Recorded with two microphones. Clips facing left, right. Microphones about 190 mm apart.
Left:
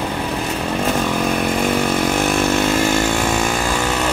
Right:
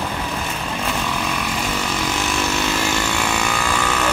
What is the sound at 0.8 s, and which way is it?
Vehicle, 50° left (ahead or behind).